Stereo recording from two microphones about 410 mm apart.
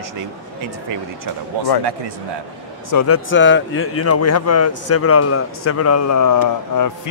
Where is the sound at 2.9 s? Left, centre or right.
Left.